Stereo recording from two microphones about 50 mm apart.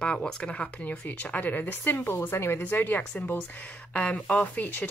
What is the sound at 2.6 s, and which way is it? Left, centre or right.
Speech, left.